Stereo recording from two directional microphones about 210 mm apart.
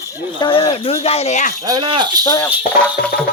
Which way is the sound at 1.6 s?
20° right (ahead or behind).